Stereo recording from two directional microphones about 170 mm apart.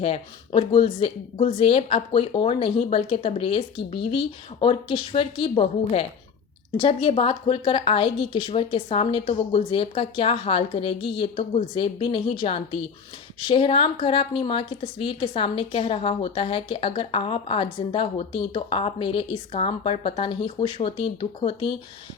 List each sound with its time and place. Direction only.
0.0 s a woman's voice: 35° left (ahead or behind)
4.6 s a woman's voice: 30° left (ahead or behind)